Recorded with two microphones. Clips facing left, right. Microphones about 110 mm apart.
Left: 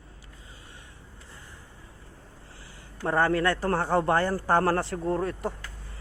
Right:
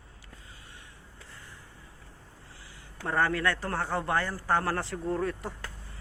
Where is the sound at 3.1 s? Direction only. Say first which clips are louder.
Left 4 dB; 30° left (ahead or behind).